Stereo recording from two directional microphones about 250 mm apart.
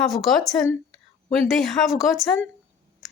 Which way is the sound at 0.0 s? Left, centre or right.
Centre.